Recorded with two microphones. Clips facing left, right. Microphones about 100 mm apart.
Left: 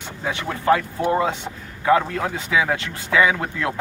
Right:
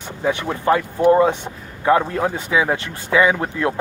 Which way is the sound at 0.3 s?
20° right (ahead or behind).